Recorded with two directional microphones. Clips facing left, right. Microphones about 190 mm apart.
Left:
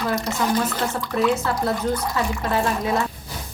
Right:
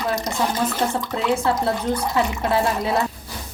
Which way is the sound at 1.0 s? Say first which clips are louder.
Left 3 dB; 20° right (ahead or behind).